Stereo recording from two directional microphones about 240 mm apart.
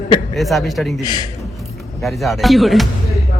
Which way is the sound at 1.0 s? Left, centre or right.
Centre.